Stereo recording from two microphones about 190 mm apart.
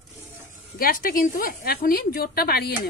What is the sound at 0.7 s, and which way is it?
A woman's voice, 50° left (ahead or behind).